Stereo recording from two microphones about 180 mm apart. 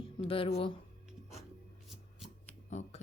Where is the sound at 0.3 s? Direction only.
30° left (ahead or behind).